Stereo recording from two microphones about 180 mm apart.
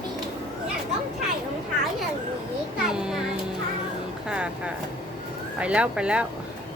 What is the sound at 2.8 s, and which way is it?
Music, 5° right (ahead or behind).